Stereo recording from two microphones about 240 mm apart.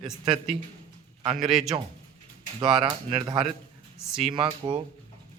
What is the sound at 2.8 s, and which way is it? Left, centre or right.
Speech, centre.